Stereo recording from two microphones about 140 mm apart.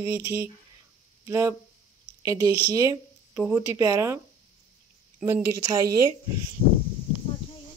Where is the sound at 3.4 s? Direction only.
10° right (ahead or behind).